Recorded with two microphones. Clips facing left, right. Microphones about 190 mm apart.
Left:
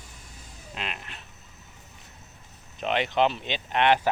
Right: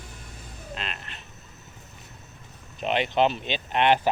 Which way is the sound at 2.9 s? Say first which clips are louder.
Right 1 dB; 20° right (ahead or behind).